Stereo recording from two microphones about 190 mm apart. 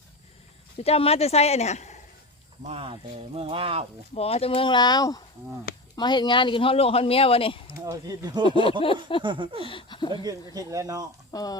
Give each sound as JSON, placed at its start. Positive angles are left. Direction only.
{"t": 0.8, "sound": "speech", "side_deg": 30}
{"t": 2.6, "sound": "speech", "side_deg": -30}
{"t": 4.1, "sound": "speech", "side_deg": 30}
{"t": 7.9, "sound": "a man's voice", "side_deg": -20}
{"t": 8.8, "sound": "speech", "side_deg": 25}
{"t": 9.2, "sound": "a man's voice", "side_deg": -25}
{"t": 9.6, "sound": "speech", "side_deg": 25}
{"t": 10.1, "sound": "a man's voice", "side_deg": -20}
{"t": 11.3, "sound": "speech", "side_deg": 20}